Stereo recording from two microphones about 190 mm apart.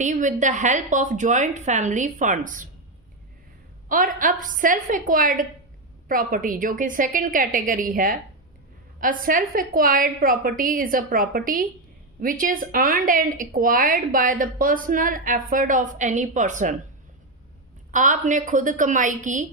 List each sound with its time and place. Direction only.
0.0 s a woman's voice: 40° right (ahead or behind)
3.8 s speech: 45° right (ahead or behind)
17.9 s a woman's voice: 40° right (ahead or behind)